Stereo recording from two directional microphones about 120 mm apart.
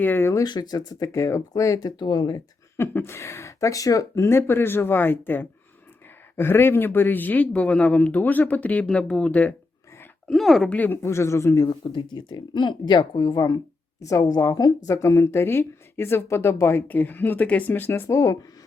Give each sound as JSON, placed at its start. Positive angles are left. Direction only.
{"t": 0.0, "sound": "speech", "side_deg": 20}
{"t": 0.4, "sound": "speech", "side_deg": 35}
{"t": 2.7, "sound": "speech", "side_deg": 20}
{"t": 10.8, "sound": "speech", "side_deg": 15}
{"t": 11.8, "sound": "speech", "side_deg": 40}